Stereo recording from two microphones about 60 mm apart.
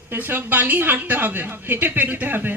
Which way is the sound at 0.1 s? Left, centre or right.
Right.